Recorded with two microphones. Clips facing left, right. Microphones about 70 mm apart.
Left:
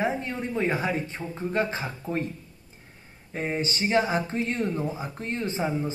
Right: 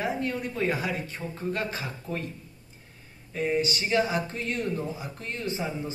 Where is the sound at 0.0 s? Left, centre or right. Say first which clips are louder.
Left 1 dB; left.